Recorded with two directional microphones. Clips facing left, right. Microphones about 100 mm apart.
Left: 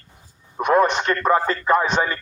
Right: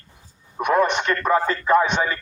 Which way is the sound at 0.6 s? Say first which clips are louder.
Left 2 dB; 35° left (ahead or behind).